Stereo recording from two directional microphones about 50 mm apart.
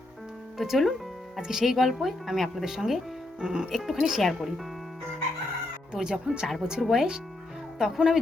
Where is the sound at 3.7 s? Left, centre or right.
Centre.